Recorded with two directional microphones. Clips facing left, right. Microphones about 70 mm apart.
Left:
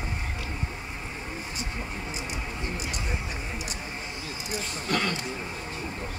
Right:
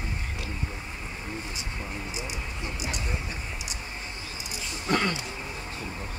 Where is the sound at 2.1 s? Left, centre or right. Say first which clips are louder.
Left 1 dB; left.